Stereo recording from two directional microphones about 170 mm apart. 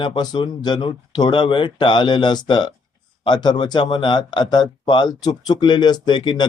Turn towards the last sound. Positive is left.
turn(degrees=25)  # may be behind; listen again after turning